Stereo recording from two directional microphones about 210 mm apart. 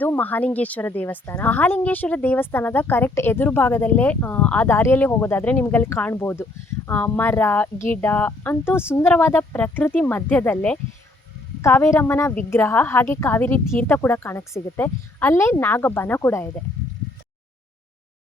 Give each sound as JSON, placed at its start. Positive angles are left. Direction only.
{"t": 0.0, "sound": "a woman's voice", "side_deg": 10}